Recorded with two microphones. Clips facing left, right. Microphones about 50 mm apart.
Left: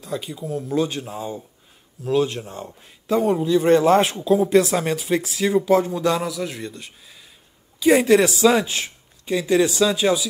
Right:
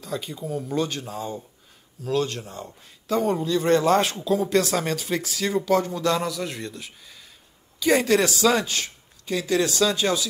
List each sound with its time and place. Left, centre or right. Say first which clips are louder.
0.0 s a man's voice: left 2 dB; centre; by 2.7 s left
3.1 s a man's voice: left 4 dB; centre
7.8 s speech: left 5 dB; centre